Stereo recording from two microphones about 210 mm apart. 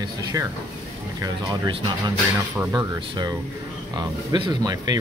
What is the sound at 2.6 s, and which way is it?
Speech, 5° right (ahead or behind).